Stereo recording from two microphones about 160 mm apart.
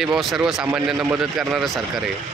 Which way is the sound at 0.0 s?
Centre (ahead or behind).